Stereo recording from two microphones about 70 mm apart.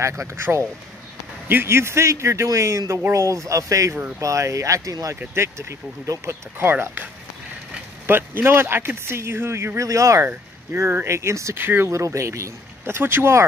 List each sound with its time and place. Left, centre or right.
0.0 s speech: right
6.6 s speech: right
8.1 s speech: right
11.6 s speech: right
11.9 s speech: right